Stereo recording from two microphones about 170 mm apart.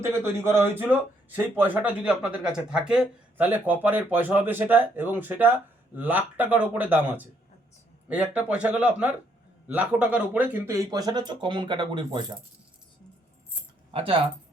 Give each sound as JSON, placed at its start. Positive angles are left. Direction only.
{"t": 0.1, "sound": "speech", "side_deg": -15}
{"t": 13.9, "sound": "speech", "side_deg": -30}